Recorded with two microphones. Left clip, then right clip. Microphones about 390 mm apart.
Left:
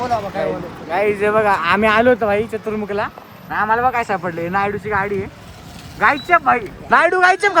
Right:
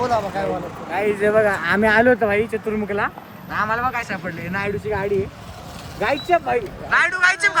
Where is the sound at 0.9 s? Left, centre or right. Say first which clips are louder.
Left 2 dB; centre.